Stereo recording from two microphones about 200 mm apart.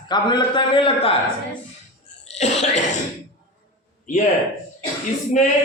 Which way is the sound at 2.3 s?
35° left (ahead or behind).